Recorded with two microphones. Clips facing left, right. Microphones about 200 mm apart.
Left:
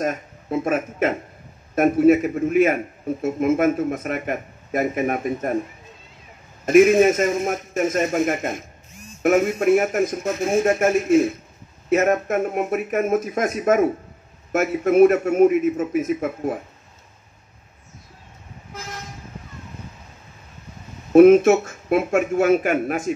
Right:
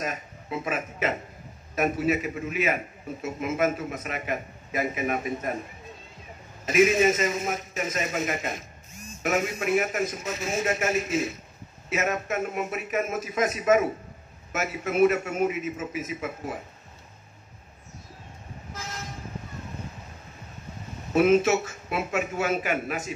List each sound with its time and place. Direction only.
0.0 s a man's voice: 50° left (ahead or behind)
6.6 s a man's voice: 50° left (ahead or behind)
21.1 s a man's voice: 55° left (ahead or behind)